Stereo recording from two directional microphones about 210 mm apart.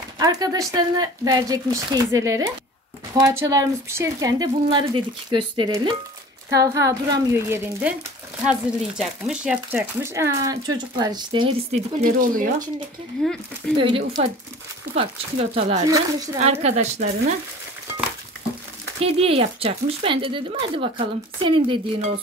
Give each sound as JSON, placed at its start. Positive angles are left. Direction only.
{"t": 0.2, "sound": "speech", "side_deg": -15}
{"t": 13.2, "sound": "speech", "side_deg": 0}
{"t": 13.7, "sound": "speech", "side_deg": -25}
{"t": 18.9, "sound": "speech", "side_deg": -30}